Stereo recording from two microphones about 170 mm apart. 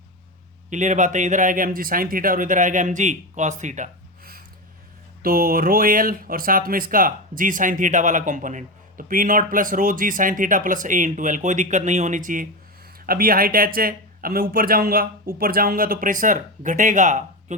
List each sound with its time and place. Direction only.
0.7 s speech: 45° right (ahead or behind)